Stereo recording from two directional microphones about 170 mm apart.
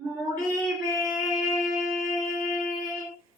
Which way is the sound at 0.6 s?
Centre (ahead or behind).